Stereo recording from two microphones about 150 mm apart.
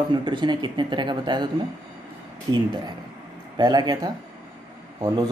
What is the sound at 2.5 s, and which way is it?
Speech, 25° right (ahead or behind).